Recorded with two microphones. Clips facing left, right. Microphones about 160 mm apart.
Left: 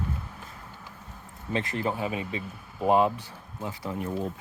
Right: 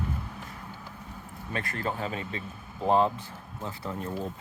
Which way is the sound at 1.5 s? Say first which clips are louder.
Left 4 dB; 20° left (ahead or behind).